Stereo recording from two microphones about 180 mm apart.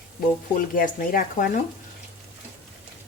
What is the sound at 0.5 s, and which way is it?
Speech, 50° left (ahead or behind).